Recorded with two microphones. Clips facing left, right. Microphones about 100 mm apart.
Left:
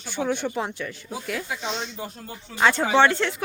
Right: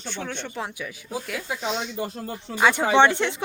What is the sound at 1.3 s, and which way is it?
A woman's voice, 5° right (ahead or behind).